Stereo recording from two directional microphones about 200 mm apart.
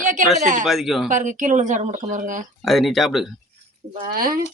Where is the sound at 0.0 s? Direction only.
40° right (ahead or behind).